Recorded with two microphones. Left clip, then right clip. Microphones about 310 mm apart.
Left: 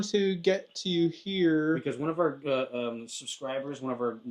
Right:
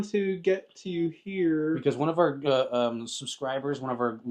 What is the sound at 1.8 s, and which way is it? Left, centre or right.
Speech, right.